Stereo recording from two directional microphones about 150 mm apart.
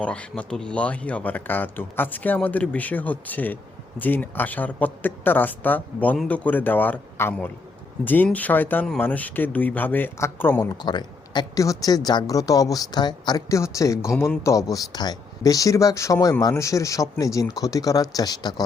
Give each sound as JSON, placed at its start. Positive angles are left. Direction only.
{"t": 0.0, "sound": "speech", "side_deg": 10}